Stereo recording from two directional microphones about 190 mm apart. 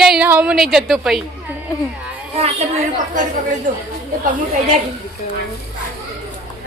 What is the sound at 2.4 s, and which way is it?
A woman's voice, 35° right (ahead or behind).